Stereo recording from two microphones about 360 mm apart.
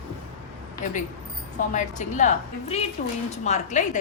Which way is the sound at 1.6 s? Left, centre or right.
Centre.